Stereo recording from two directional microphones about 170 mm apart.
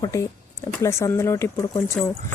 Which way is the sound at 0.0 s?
20° left (ahead or behind).